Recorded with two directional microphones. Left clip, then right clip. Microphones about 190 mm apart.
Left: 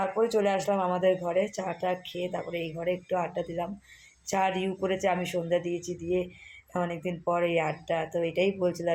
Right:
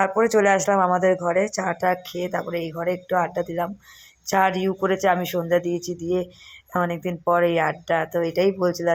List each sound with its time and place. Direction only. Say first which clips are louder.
0.3 s speech: right 11 dB; 35° right (ahead or behind)